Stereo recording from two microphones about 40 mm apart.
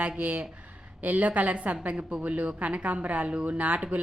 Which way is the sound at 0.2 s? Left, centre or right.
Right.